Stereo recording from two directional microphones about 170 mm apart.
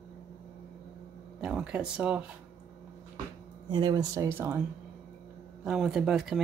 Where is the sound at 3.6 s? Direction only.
25° right (ahead or behind).